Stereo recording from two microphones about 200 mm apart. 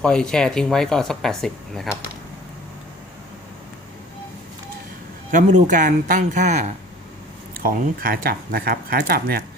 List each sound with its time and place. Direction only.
0.0 s speech: 5° left (ahead or behind)
5.3 s a man's voice: 40° right (ahead or behind)
7.6 s speech: 45° right (ahead or behind)